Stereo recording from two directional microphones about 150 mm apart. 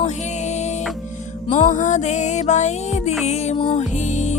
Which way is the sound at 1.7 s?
55° left (ahead or behind).